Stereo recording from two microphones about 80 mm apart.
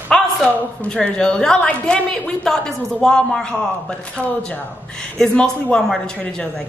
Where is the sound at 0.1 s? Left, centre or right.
Centre.